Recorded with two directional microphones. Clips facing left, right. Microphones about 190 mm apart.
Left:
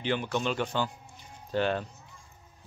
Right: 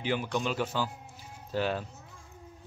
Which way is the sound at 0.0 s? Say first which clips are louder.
Left 1 dB; 5° right (ahead or behind).